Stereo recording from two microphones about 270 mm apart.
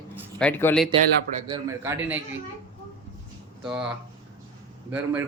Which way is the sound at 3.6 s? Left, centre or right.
Centre.